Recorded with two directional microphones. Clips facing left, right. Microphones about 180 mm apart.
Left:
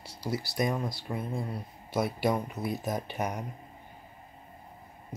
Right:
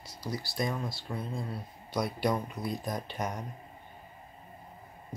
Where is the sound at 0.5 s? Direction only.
20° left (ahead or behind).